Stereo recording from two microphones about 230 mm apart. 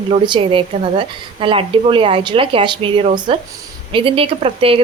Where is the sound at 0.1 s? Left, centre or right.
Right.